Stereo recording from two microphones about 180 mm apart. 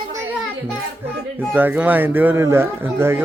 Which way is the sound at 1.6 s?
10° right (ahead or behind).